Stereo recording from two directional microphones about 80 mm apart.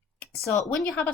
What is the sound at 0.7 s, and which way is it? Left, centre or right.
Speech, centre.